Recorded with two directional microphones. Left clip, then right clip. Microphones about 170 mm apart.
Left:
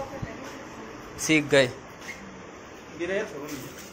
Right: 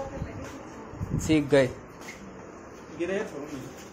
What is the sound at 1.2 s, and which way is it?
Speech, 15° right (ahead or behind).